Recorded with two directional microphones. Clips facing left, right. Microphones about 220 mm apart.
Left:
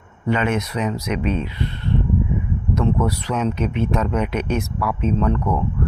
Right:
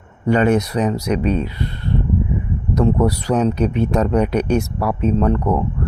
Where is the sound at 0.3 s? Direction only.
40° right (ahead or behind).